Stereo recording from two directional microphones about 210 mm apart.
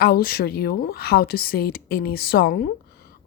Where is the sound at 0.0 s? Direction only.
45° left (ahead or behind).